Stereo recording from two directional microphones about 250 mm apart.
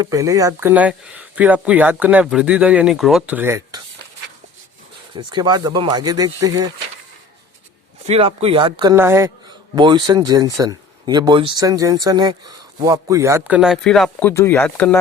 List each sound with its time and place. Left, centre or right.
0.0 s speech: centre
5.1 s speech: centre
8.0 s speech: right; by 14.9 s centre